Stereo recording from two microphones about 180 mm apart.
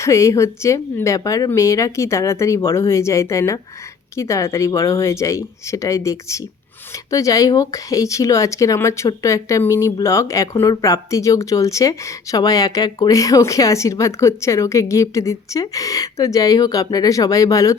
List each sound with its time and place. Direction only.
0.0 s speech: 15° left (ahead or behind)